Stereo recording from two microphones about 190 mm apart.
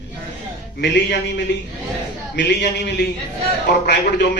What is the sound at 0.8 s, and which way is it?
Speech, 60° left (ahead or behind).